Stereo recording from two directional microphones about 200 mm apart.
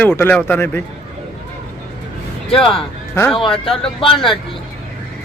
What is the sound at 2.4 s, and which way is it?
Speech, centre (ahead or behind).